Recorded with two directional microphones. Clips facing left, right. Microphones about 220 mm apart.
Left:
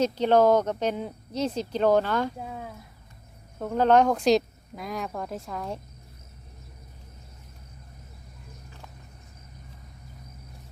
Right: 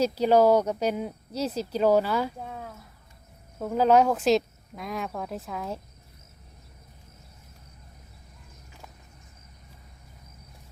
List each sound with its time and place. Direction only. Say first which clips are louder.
0.0 s speech: even; 10° right (ahead or behind)
2.4 s speech: left 1 dB; 5° left (ahead or behind)